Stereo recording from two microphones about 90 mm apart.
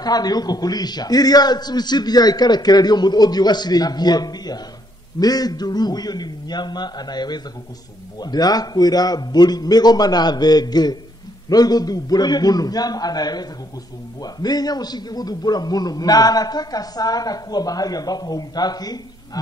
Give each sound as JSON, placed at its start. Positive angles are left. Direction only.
{"t": 0.0, "sound": "a man's voice", "side_deg": 45}